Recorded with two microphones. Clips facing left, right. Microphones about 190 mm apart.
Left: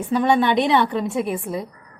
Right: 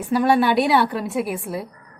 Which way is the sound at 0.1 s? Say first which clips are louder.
Right 1 dB; 5° right (ahead or behind).